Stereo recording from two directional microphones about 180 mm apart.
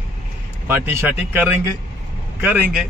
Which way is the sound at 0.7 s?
10° right (ahead or behind).